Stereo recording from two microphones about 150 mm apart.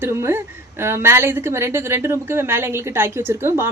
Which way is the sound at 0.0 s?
15° right (ahead or behind).